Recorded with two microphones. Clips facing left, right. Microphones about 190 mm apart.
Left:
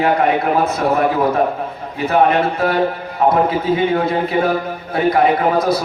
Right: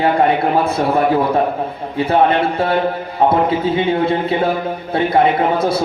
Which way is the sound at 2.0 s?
30° right (ahead or behind).